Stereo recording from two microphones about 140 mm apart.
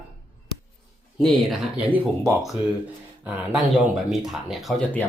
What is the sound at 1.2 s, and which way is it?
Speech, centre (ahead or behind).